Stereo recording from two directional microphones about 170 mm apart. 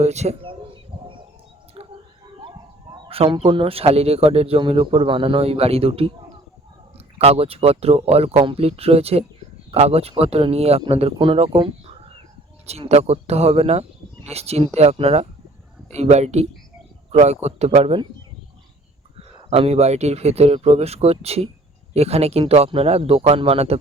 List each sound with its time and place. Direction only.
0.0 s speech: 40° right (ahead or behind)
0.7 s bird: 30° right (ahead or behind)
2.9 s speech: 30° right (ahead or behind)
7.2 s speech: 35° right (ahead or behind)
19.4 s speech: 35° right (ahead or behind)